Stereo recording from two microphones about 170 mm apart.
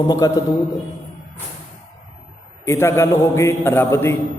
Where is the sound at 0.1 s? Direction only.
20° left (ahead or behind).